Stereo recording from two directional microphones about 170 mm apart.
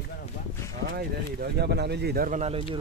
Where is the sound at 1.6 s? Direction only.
75° right (ahead or behind).